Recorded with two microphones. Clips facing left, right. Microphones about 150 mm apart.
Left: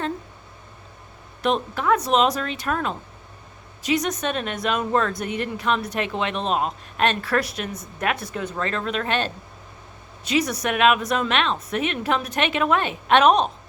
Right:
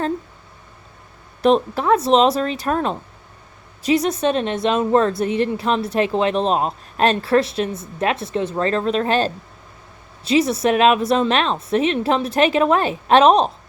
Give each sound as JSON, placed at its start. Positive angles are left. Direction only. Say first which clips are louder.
{"t": 1.4, "sound": "speech", "louder": "right 7 dB", "side_deg": -35}